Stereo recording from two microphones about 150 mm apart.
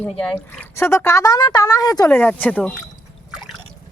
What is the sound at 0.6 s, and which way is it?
Speech, 15° left (ahead or behind).